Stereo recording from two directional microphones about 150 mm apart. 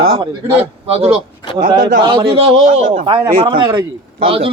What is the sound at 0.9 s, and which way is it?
Speech, 45° right (ahead or behind).